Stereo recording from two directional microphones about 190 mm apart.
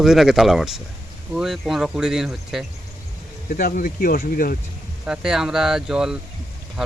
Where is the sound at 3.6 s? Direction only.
50° left (ahead or behind).